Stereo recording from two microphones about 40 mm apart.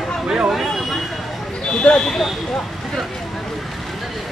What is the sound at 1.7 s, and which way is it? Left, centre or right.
Speech, left.